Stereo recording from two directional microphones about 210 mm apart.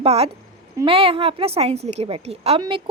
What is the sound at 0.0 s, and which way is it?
A woman's voice, 30° right (ahead or behind).